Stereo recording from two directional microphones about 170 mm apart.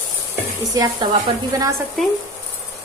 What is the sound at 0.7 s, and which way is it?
A woman's voice, 25° right (ahead or behind).